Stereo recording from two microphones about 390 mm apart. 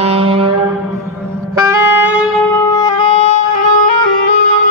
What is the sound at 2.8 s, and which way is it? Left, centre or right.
Music, centre.